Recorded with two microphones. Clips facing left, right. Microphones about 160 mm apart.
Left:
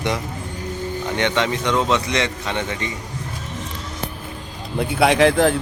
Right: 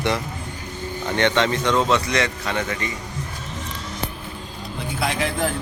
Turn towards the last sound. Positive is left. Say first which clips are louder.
# left 9 dB
turn(degrees=75)  # may be behind; listen again after turning